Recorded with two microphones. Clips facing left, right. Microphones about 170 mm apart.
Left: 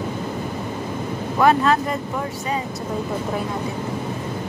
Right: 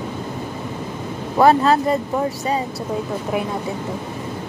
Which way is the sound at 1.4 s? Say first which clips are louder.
Right 3 dB; 35° right (ahead or behind).